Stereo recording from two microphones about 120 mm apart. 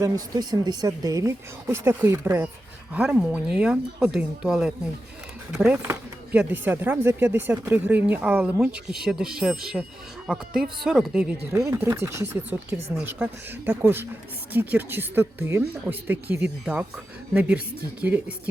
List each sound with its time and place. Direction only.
0.0 s speech: 30° right (ahead or behind)
1.6 s speech: 20° right (ahead or behind)
2.9 s speech: 5° right (ahead or behind)
11.7 s speech: 25° right (ahead or behind)